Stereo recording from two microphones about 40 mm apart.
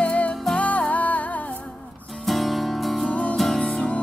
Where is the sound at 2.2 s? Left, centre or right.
Centre.